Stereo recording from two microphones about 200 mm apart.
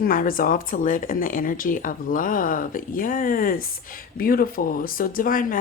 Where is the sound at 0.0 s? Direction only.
45° left (ahead or behind).